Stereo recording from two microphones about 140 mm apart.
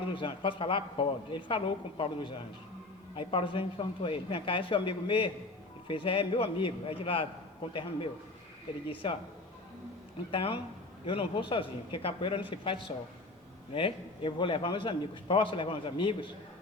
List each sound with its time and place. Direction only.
0.1 s a man's voice: 35° left (ahead or behind)
10.3 s a man's voice: 40° left (ahead or behind)